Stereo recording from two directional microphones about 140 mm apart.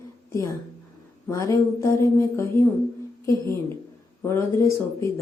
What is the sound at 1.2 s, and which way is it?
Speech, 20° left (ahead or behind).